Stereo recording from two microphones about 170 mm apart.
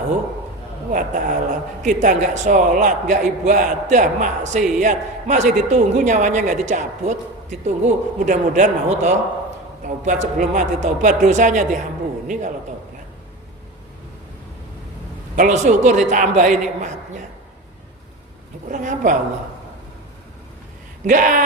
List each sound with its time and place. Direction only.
0.9 s speech: 50° right (ahead or behind)
15.4 s speech: 45° right (ahead or behind)
18.7 s speech: 50° right (ahead or behind)
21.1 s speech: 50° right (ahead or behind)